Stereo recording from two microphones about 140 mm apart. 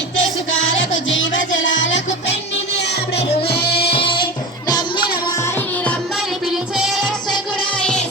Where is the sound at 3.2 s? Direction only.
40° left (ahead or behind).